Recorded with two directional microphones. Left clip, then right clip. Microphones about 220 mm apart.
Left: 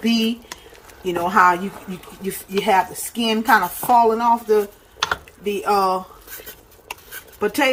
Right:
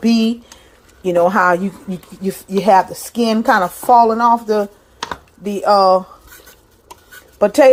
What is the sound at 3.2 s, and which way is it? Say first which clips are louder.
Speech: right 2 dB; 30° right (ahead or behind).